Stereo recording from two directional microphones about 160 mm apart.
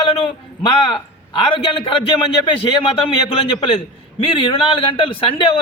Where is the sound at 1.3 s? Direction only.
35° left (ahead or behind).